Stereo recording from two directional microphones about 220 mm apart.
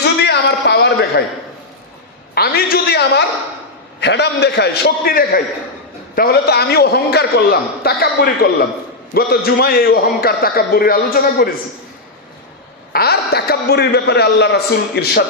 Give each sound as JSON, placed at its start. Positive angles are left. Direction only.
{"t": 0.0, "sound": "a sound", "side_deg": 50}
{"t": 2.3, "sound": "a man's voice", "side_deg": 45}
{"t": 12.9, "sound": "a man's voice", "side_deg": 45}